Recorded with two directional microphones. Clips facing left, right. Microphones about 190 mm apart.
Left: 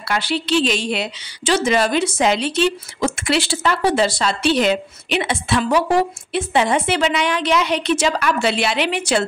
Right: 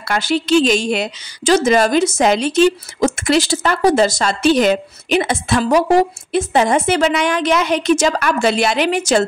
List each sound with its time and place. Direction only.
0.1 s a woman's voice: 45° right (ahead or behind)